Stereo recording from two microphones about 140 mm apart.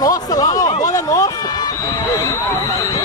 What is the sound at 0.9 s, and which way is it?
Run, 25° left (ahead or behind).